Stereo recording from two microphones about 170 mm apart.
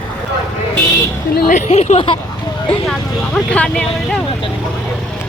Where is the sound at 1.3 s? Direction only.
55° left (ahead or behind); by 2.2 s 35° left (ahead or behind).